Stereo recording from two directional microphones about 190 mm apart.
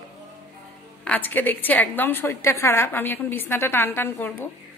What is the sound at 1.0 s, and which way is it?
A woman's voice, 10° left (ahead or behind).